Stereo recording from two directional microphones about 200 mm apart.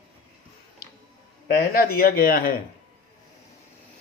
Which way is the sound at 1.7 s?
50° left (ahead or behind).